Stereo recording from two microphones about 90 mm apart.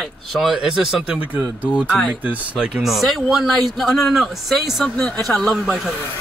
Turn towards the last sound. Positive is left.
turn(degrees=5)  # may be behind; listen again after turning